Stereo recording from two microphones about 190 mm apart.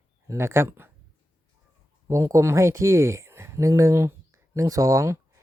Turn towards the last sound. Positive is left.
turn(degrees=-15)  # may be behind; listen again after turning